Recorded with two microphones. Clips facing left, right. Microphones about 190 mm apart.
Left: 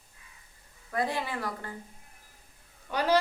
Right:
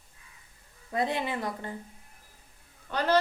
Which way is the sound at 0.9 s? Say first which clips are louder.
Right 2 dB; 20° right (ahead or behind).